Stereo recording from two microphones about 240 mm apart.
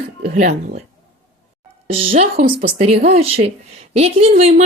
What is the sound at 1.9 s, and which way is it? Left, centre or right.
A woman's voice, right.